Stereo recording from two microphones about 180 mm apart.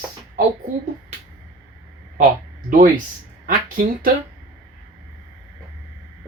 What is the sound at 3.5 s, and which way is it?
Speech, 50° right (ahead or behind).